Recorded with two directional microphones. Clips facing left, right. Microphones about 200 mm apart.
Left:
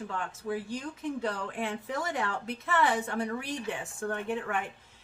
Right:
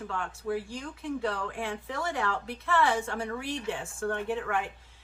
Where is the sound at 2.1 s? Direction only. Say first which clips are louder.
Right 1 dB; 20° left (ahead or behind).